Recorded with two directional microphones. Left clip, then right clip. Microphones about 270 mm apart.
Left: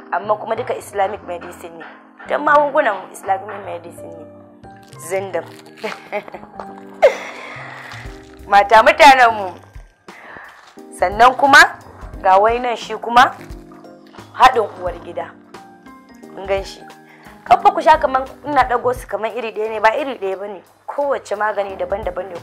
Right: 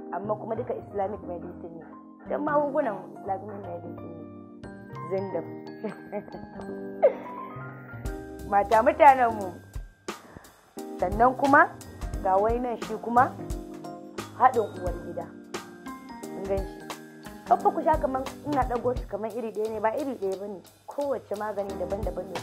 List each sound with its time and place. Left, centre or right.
0.1 s a woman's voice: centre
5.3 s a woman's voice: centre
7.0 s music: centre
8.5 s a woman's voice: centre
11.0 s a woman's voice: centre
14.3 s music: centre
16.4 s a woman's voice: centre